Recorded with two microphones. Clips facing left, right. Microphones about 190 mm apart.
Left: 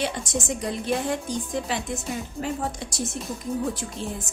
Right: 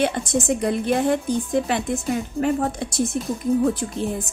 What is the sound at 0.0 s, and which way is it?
A woman's voice, 55° right (ahead or behind).